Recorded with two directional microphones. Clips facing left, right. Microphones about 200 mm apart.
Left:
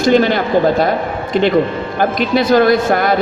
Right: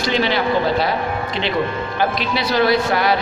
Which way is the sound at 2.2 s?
50° left (ahead or behind).